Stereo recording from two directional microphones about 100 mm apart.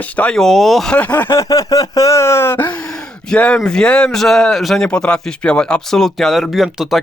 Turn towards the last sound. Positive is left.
turn(degrees=0)  # may be behind; listen again after turning